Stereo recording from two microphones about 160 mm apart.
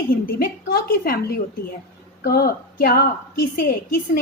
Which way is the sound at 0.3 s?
70° left (ahead or behind).